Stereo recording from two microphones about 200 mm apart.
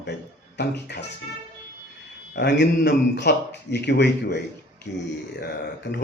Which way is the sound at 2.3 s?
60° left (ahead or behind).